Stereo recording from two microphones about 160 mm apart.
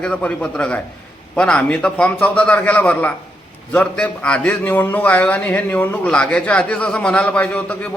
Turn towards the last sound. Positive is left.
turn(degrees=10)  # may be behind; listen again after turning